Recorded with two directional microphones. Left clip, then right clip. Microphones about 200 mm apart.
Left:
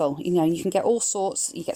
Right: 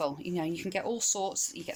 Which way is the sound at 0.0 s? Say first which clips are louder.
Left 10 dB; 35° left (ahead or behind).